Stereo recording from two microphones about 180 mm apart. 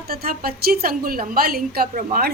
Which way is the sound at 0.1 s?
60° right (ahead or behind).